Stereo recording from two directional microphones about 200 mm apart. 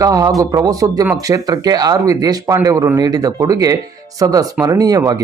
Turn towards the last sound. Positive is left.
turn(degrees=-15)  # may be behind; listen again after turning